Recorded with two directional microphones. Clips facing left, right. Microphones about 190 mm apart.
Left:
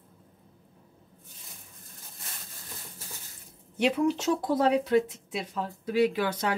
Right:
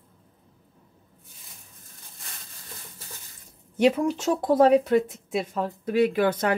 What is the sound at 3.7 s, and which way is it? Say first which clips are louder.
Speech: right 4 dB; 45° right (ahead or behind).